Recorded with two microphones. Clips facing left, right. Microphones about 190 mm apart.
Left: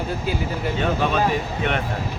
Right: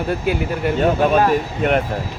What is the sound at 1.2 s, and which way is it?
Speech, 45° right (ahead or behind).